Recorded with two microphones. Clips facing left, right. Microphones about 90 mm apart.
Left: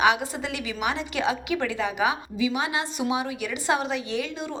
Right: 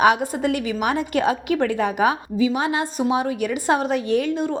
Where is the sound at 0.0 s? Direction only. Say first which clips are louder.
Right 5 dB; 45° right (ahead or behind).